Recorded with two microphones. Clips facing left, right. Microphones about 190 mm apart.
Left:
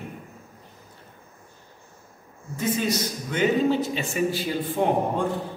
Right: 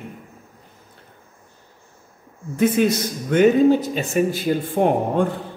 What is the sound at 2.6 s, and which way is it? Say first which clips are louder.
Speech: right 7 dB; 60° right (ahead or behind).